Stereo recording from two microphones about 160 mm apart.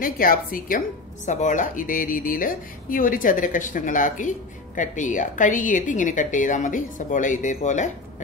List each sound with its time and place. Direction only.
0.0 s a woman's voice: 60° left (ahead or behind)